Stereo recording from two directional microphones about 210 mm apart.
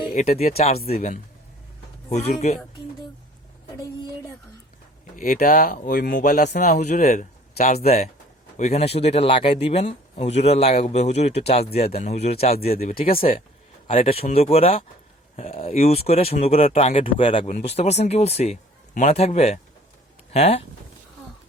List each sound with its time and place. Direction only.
0.1 s speech: 30° left (ahead or behind)
5.1 s speech: 40° left (ahead or behind)